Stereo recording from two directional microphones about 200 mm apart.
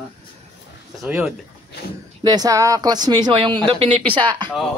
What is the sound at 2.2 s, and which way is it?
Speech, 20° right (ahead or behind).